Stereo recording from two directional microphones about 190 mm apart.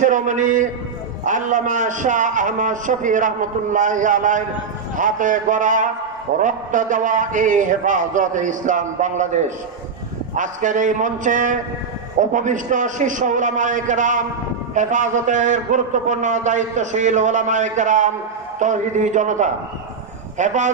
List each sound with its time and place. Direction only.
0.0 s a man's voice: 40° right (ahead or behind)